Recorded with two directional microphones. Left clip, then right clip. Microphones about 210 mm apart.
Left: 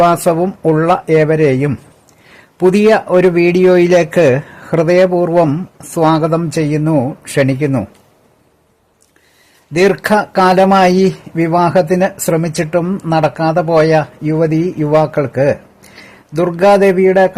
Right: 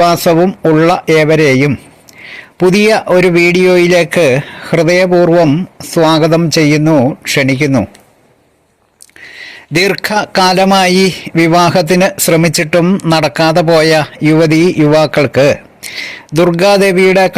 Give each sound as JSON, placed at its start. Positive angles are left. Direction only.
{"t": 0.0, "sound": "speech", "side_deg": -15}
{"t": 9.7, "sound": "speech", "side_deg": -15}
{"t": 16.3, "sound": "a sound", "side_deg": -15}